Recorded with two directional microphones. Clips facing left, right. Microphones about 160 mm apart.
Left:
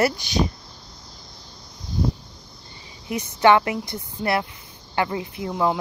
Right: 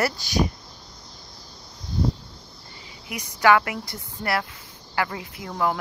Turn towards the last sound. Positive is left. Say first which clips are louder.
# left 3 dB
turn(degrees=20)  # may be behind; listen again after turning